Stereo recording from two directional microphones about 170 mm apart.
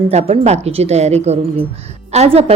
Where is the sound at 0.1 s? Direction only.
40° right (ahead or behind).